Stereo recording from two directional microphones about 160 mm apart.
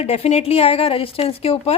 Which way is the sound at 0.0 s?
40° left (ahead or behind).